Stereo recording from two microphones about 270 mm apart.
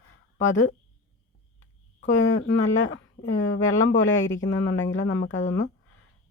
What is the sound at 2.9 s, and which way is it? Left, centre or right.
Speech, left.